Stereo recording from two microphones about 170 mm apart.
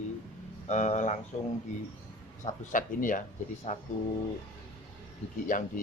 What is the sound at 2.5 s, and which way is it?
Speech, 50° left (ahead or behind).